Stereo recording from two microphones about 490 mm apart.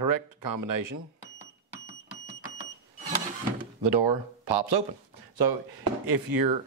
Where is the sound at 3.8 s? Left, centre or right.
Right.